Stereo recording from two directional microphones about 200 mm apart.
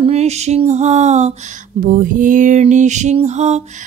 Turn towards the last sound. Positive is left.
turn(degrees=-35)  # may be behind; listen again after turning